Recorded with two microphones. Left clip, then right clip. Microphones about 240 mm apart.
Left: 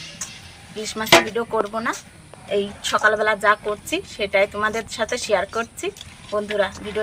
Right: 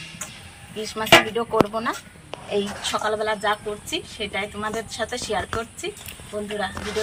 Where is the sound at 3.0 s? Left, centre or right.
Left.